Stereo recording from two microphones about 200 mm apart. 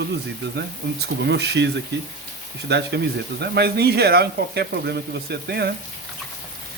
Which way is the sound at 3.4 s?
55° right (ahead or behind).